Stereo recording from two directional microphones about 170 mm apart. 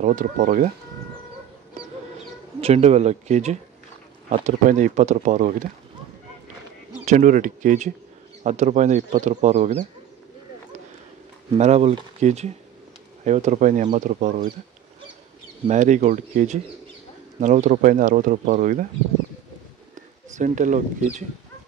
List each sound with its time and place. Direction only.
0.0 s speech: 50° right (ahead or behind)
2.6 s speech: 40° right (ahead or behind)
7.1 s speech: 50° right (ahead or behind)
11.5 s speech: 40° right (ahead or behind)
15.6 s speech: 45° right (ahead or behind)
20.3 s speech: 45° right (ahead or behind)